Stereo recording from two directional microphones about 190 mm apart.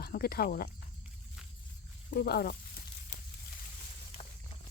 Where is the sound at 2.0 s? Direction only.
55° left (ahead or behind).